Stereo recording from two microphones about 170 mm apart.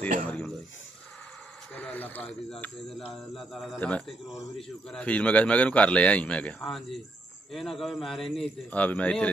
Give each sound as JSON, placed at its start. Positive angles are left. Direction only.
{"t": 0.3, "sound": "a man's voice", "side_deg": 5}
{"t": 1.8, "sound": "a man's voice", "side_deg": 10}